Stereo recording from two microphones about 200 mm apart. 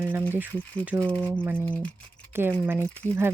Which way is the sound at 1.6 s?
5° left (ahead or behind).